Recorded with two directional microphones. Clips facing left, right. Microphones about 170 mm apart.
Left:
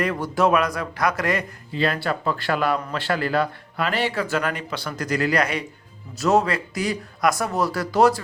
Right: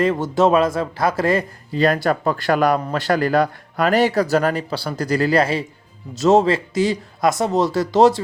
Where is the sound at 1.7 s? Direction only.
45° right (ahead or behind).